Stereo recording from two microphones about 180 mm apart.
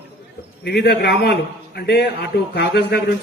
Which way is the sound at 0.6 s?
65° left (ahead or behind).